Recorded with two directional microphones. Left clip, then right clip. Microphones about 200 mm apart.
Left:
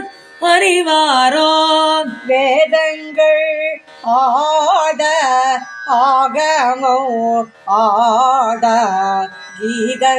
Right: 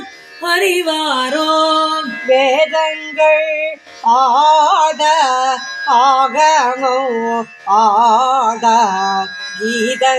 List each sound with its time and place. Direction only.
0.4 s music: 25° left (ahead or behind)
2.3 s music: 25° right (ahead or behind)
9.8 s speech: 25° right (ahead or behind)